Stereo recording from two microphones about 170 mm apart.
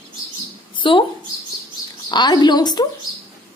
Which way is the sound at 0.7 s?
30° left (ahead or behind).